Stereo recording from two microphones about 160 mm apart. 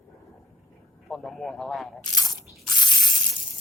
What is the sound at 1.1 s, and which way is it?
Speech, centre (ahead or behind).